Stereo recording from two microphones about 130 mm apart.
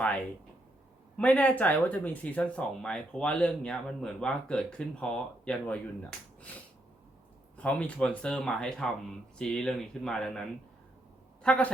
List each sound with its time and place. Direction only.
1.1 s speech: 10° left (ahead or behind)
11.4 s speech: 10° left (ahead or behind)